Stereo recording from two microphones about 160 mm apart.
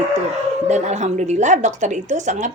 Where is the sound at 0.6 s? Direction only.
45° right (ahead or behind).